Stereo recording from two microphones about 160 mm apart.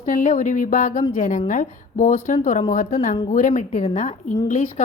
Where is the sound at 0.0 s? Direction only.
55° left (ahead or behind).